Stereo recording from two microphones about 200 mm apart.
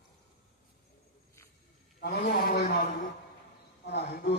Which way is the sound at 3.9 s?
55° left (ahead or behind).